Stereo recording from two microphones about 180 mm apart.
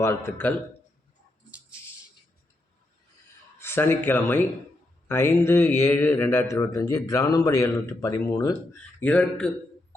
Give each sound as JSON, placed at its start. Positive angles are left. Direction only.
{"t": 0.0, "sound": "a man's voice", "side_deg": 15}
{"t": 3.6, "sound": "a man's voice", "side_deg": 15}
{"t": 9.0, "sound": "a man's voice", "side_deg": 5}